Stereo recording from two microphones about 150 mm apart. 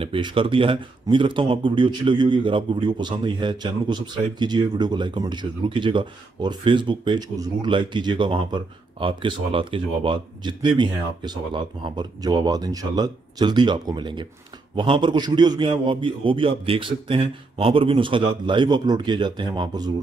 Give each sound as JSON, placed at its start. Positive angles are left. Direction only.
{"t": 0.0, "sound": "speech", "side_deg": -35}